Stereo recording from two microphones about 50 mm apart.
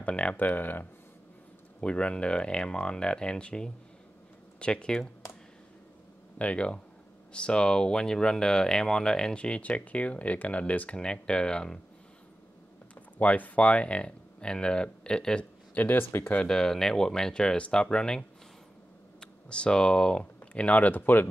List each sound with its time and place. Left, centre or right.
0.0 s speech: left
0.5 s speech: left
1.8 s speech: left
6.3 s speech: left
13.2 s speech: left
15.7 s speech: left
16.4 s speech: centre
20.5 s speech: left